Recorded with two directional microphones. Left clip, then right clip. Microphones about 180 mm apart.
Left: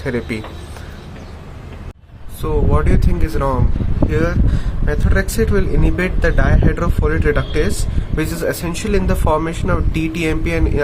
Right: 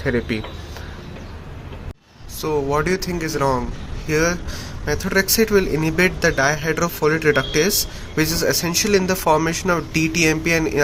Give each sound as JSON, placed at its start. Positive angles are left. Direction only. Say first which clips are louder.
{"t": 0.0, "sound": "speech", "louder": "even", "side_deg": -10}
{"t": 2.4, "sound": "speech", "louder": "even", "side_deg": -10}